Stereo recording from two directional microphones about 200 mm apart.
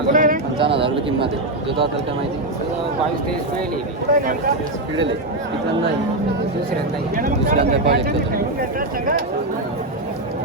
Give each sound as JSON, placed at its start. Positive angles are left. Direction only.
{"t": 0.1, "sound": "a sound", "side_deg": -45}
{"t": 0.6, "sound": "speech", "side_deg": -25}
{"t": 4.1, "sound": "speech", "side_deg": -45}
{"t": 7.2, "sound": "speech", "side_deg": -45}